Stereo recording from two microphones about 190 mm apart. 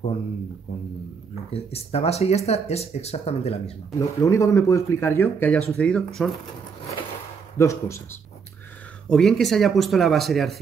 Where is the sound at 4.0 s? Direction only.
15° left (ahead or behind).